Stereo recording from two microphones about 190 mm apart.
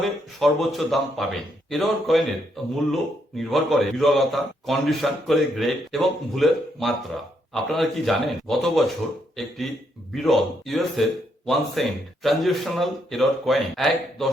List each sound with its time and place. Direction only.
0.0 s a man's voice: centre (ahead or behind)